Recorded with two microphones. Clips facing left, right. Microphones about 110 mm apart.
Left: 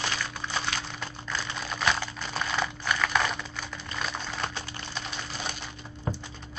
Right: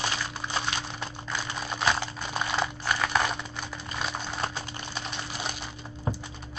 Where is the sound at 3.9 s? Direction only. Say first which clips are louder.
Right 1 dB; 15° right (ahead or behind).